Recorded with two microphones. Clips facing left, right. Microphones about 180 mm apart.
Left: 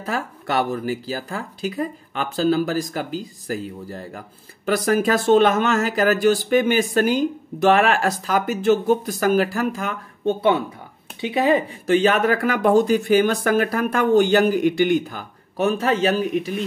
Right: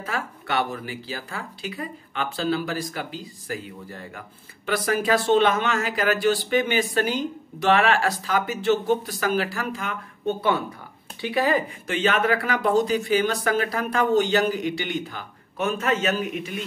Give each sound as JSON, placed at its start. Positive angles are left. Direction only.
{"t": 0.0, "sound": "speech", "side_deg": 40}
{"t": 10.2, "sound": "speech", "side_deg": 25}
{"t": 11.8, "sound": "speech", "side_deg": 40}